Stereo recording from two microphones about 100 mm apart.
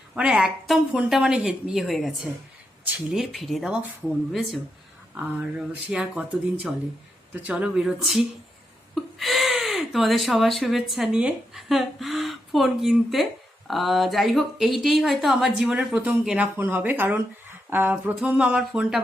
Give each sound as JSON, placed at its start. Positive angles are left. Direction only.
{"t": 0.2, "sound": "speech", "side_deg": -10}
{"t": 3.1, "sound": "speech", "side_deg": 0}
{"t": 5.1, "sound": "speech", "side_deg": -15}
{"t": 9.1, "sound": "gasp", "side_deg": 0}
{"t": 10.7, "sound": "speech", "side_deg": 0}